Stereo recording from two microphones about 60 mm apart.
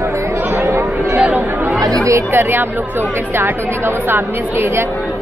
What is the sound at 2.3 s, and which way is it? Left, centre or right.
Speech, right.